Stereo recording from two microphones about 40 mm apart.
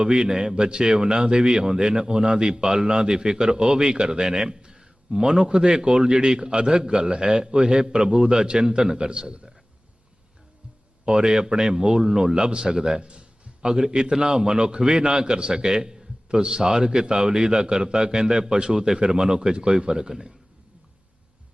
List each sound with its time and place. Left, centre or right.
0.0 s a man's voice: centre
11.0 s a man's voice: right